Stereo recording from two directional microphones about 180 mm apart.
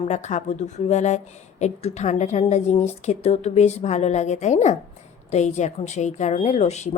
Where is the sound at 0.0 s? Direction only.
40° left (ahead or behind).